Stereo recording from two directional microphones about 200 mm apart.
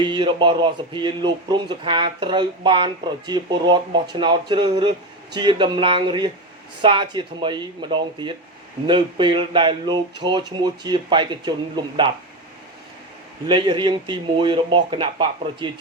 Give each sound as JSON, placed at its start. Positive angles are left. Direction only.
{"t": 0.0, "sound": "speech", "side_deg": -25}
{"t": 13.5, "sound": "speech", "side_deg": -25}